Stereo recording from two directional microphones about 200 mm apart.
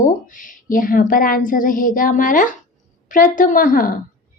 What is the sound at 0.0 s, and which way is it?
Speech, 40° left (ahead or behind).